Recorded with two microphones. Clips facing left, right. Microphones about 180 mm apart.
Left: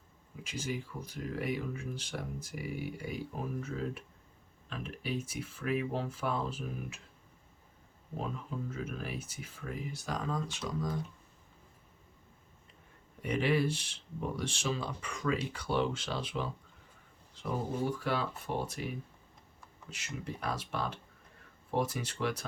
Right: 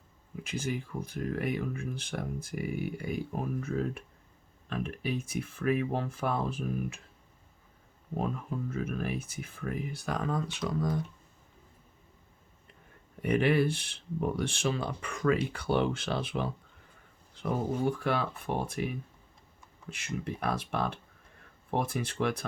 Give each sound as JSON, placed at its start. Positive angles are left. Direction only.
{"t": 0.4, "sound": "speech", "side_deg": -55}
{"t": 8.7, "sound": "speech", "side_deg": -55}
{"t": 13.2, "sound": "speech", "side_deg": -55}
{"t": 19.9, "sound": "speech", "side_deg": -55}